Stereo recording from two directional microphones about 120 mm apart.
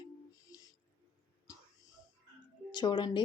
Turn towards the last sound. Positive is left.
turn(degrees=40)  # may be behind; listen again after turning